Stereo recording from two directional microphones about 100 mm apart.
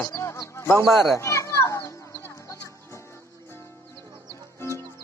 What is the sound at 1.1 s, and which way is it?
Children playing, 30° left (ahead or behind).